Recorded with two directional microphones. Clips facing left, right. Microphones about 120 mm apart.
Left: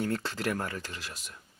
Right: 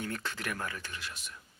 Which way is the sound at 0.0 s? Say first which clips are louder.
Left 6 dB; 30° left (ahead or behind).